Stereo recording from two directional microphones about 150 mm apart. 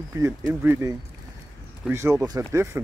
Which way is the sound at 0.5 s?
15° right (ahead or behind).